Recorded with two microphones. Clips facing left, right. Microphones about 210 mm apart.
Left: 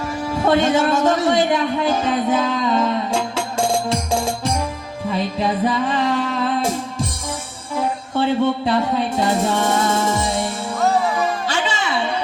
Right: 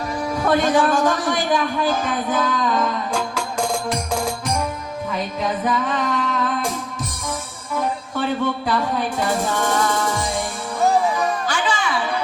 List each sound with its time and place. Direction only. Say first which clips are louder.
0.4 s a man's voice: left 1 dB; 25° left (ahead or behind)
3.8 s music: left 2 dB; 25° left (ahead or behind)
10.8 s music: right 1 dB; 15° right (ahead or behind)
11.4 s music: even; 25° left (ahead or behind)